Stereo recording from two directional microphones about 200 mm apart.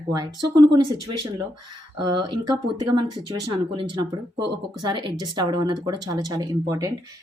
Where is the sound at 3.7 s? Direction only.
25° right (ahead or behind).